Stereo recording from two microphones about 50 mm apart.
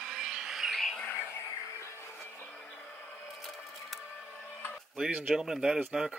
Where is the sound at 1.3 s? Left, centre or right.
Left.